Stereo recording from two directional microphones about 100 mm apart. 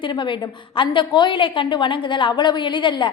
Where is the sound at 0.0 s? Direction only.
55° left (ahead or behind).